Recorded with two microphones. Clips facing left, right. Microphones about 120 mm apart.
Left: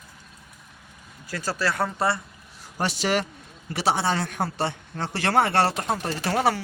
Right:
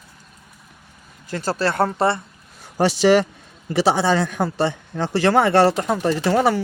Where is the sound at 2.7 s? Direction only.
90° right.